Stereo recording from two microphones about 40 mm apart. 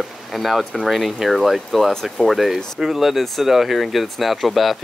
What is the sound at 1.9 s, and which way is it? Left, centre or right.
Speech, centre.